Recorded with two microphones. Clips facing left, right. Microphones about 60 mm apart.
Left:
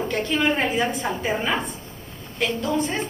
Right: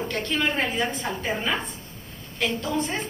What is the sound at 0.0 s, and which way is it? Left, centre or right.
A woman's voice, centre.